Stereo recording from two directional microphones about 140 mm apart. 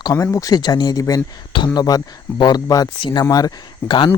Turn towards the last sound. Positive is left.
turn(degrees=35)  # may be behind; listen again after turning